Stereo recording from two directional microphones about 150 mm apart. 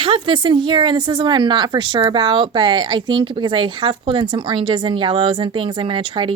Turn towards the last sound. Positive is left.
turn(degrees=-35)  # may be behind; listen again after turning